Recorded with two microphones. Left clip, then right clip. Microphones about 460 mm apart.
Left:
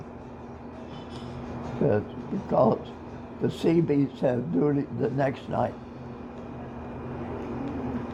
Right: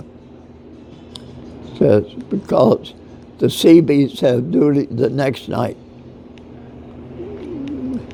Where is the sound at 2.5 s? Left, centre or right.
Right.